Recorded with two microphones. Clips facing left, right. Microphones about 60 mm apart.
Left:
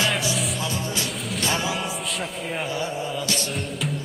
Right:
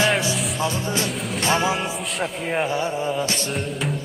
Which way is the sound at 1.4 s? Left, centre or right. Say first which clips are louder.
Right 5 dB; right.